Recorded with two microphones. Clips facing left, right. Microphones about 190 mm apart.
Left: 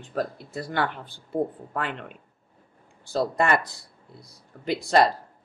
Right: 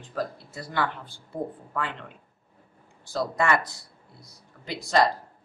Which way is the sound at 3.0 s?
55° left (ahead or behind).